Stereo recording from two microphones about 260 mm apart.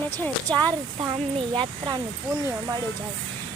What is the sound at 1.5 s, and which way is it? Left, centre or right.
Speech, centre.